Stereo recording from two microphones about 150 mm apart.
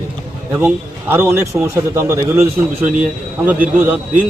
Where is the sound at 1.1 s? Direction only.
15° right (ahead or behind).